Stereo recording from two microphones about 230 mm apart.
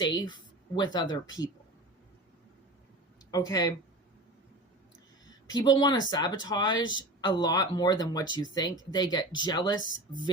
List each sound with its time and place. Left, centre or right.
0.0 s speech: centre
3.3 s speech: centre
5.5 s speech: centre